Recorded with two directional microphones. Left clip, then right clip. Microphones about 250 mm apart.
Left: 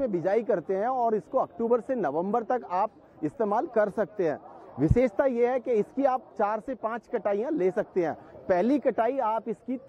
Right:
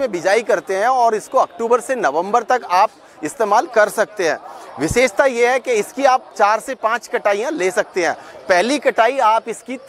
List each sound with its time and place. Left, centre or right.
0.0 s speech: centre